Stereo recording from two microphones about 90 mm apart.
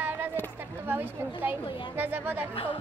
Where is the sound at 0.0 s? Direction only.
20° right (ahead or behind).